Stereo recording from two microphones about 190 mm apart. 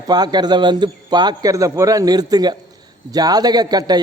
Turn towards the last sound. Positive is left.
turn(degrees=-20)  # may be behind; listen again after turning